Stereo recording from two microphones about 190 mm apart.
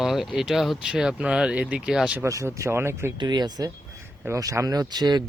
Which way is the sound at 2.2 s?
15° right (ahead or behind).